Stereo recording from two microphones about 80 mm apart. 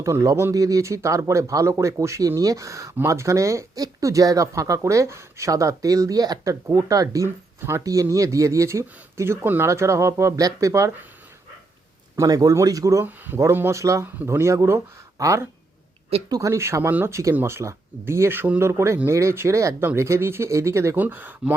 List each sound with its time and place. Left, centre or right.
0.0 s speech: right
12.1 s speech: right
13.1 s speech: right
20.9 s speech: right